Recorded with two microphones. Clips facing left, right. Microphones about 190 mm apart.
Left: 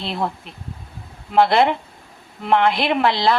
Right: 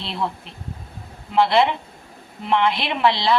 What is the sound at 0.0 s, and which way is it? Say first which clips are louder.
Speech: left 2 dB; 50° left (ahead or behind).